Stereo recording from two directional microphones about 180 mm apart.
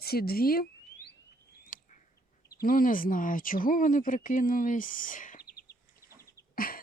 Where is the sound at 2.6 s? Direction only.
50° left (ahead or behind).